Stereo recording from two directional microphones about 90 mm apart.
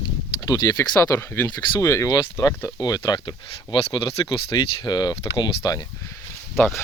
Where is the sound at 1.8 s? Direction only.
35° left (ahead or behind).